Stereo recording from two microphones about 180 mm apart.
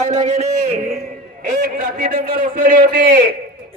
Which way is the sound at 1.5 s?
50° right (ahead or behind).